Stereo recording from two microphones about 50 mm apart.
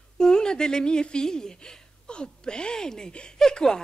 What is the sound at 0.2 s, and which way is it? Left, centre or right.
A woman's voice, centre.